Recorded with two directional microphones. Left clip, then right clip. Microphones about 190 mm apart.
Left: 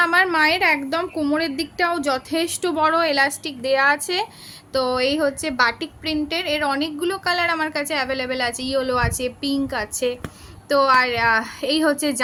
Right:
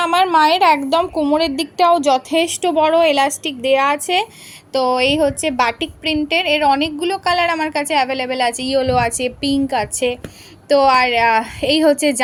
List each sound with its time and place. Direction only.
0.1 s a woman's voice: 10° right (ahead or behind)
0.7 s a woman's voice: 10° left (ahead or behind)
2.6 s a woman's voice: 10° right (ahead or behind)